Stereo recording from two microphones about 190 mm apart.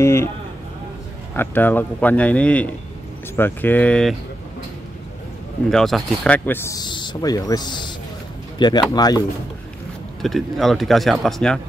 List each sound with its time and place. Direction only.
0.0 s a sound: 15° left (ahead or behind)
1.3 s speech: 10° left (ahead or behind)
5.7 s speech: centre (ahead or behind); by 9.2 s 20° left (ahead or behind)
10.2 s speech: centre (ahead or behind)